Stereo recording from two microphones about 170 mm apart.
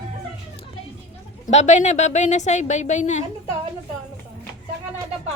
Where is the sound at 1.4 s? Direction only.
45° left (ahead or behind).